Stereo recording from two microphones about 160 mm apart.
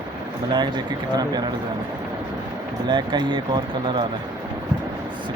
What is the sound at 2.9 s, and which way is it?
Speech, 30° right (ahead or behind).